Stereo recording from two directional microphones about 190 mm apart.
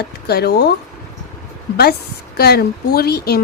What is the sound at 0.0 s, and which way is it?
Speech, 55° left (ahead or behind).